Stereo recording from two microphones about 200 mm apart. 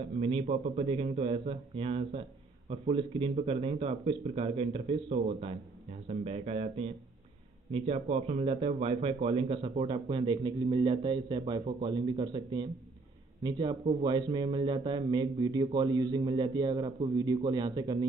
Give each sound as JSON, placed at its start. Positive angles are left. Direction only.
{"t": 0.2, "sound": "speech", "side_deg": -30}